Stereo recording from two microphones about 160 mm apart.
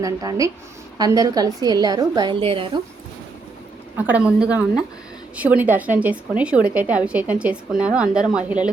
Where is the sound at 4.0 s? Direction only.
10° right (ahead or behind).